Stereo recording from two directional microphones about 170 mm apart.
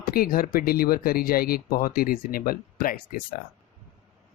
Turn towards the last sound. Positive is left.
turn(degrees=60)  # may be behind; listen again after turning